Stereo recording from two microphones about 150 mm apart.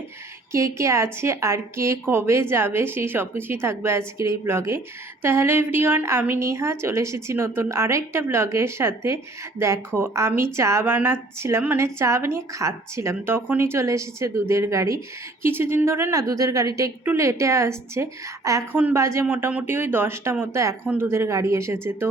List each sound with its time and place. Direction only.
0.5 s a woman's voice: 20° right (ahead or behind)